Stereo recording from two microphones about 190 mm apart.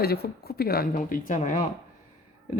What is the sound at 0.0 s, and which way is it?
A woman's voice, 55° left (ahead or behind).